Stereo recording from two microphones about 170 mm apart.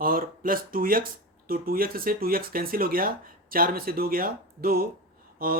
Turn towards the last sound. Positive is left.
turn(degrees=-60)  # may be behind; listen again after turning